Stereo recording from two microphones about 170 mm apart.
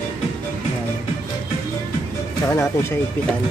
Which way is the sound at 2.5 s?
15° left (ahead or behind).